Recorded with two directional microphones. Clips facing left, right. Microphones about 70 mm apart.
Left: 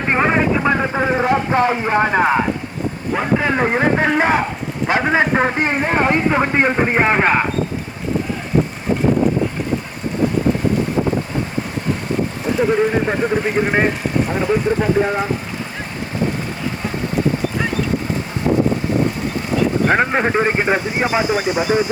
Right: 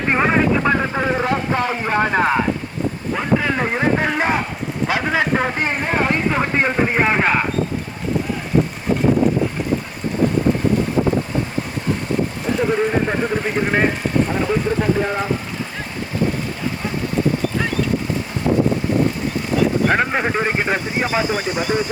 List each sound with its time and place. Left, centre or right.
0.1 s speech: centre
4.2 s speech: left
12.5 s speech: centre
19.9 s speech: centre